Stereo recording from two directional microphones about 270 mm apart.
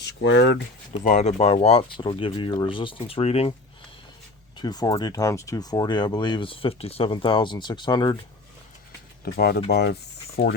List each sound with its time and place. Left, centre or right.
0.0 s speech: left
1.0 s speech: left
4.5 s speech: centre
9.2 s speech: left